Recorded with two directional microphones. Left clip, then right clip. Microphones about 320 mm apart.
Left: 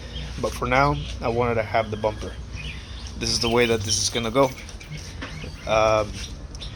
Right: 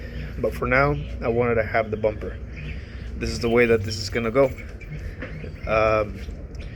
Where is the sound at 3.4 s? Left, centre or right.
Left.